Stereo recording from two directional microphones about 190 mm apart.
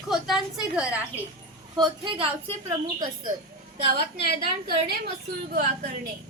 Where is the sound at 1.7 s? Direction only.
25° right (ahead or behind).